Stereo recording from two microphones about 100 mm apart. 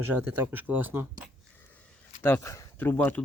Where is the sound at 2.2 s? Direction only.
25° left (ahead or behind).